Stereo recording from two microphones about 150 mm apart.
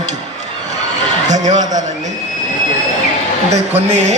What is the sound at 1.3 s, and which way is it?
Speech, 55° right (ahead or behind).